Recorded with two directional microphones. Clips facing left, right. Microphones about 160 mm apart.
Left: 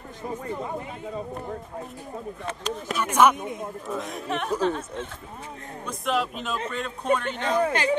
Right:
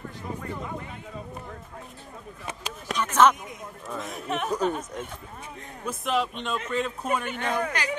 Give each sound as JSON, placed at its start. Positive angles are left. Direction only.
{"t": 2.9, "sound": "speech", "side_deg": 10}
{"t": 3.3, "sound": "speech", "side_deg": 25}
{"t": 3.8, "sound": "speech", "side_deg": 0}
{"t": 7.3, "sound": "speech", "side_deg": 25}